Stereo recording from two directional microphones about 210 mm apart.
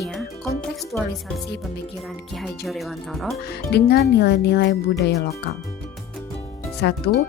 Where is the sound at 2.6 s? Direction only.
Centre (ahead or behind).